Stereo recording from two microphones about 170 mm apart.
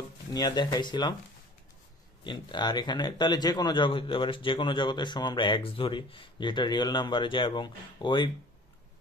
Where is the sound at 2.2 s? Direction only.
25° left (ahead or behind).